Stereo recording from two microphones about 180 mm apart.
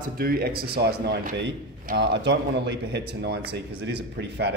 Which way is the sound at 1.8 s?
70° right (ahead or behind).